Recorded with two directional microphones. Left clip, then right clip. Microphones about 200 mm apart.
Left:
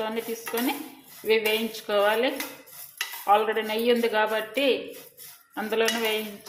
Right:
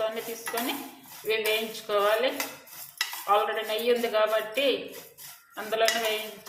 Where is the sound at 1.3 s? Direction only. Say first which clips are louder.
Left 3 dB; 30° left (ahead or behind).